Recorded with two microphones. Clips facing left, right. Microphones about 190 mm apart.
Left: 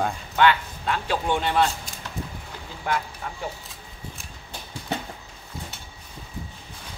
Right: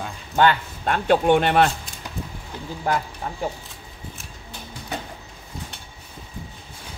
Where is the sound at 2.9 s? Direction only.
40° right (ahead or behind).